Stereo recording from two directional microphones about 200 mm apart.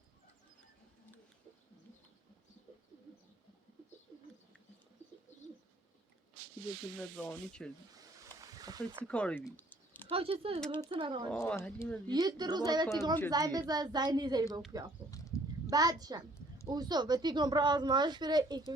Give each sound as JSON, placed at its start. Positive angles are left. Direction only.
{"t": 7.2, "sound": "rub", "side_deg": 5}
{"t": 7.9, "sound": "a sound", "side_deg": -15}
{"t": 9.0, "sound": "speech", "side_deg": 5}
{"t": 10.1, "sound": "speech", "side_deg": -30}
{"t": 11.3, "sound": "speech", "side_deg": 10}
{"t": 12.0, "sound": "speech", "side_deg": -20}
{"t": 15.1, "sound": "a sound", "side_deg": 15}
{"t": 15.7, "sound": "speech", "side_deg": -20}